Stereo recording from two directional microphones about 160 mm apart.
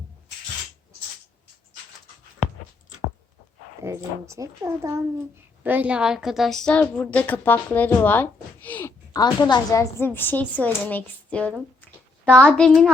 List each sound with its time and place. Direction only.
3.8 s a woman's voice: 20° right (ahead or behind); by 8.9 s 10° left (ahead or behind)
9.1 s a woman's voice: 25° left (ahead or behind); by 12.9 s centre (ahead or behind)